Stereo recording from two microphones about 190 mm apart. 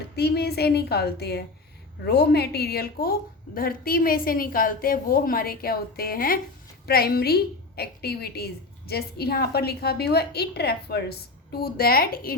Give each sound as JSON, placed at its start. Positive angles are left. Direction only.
{"t": 0.2, "sound": "a woman's voice", "side_deg": 60}